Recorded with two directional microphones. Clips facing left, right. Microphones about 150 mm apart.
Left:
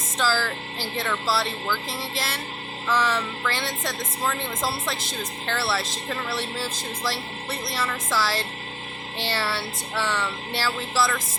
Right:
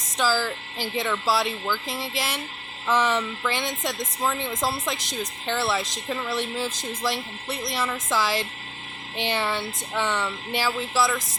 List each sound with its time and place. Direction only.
0.2 s a woman's voice: 15° right (ahead or behind)